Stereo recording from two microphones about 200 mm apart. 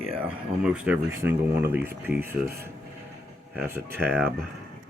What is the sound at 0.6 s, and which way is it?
Speech, 5° right (ahead or behind).